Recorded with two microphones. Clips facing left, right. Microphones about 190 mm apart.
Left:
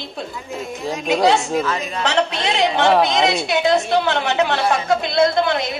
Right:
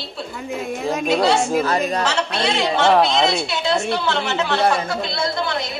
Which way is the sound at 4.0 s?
55° left (ahead or behind).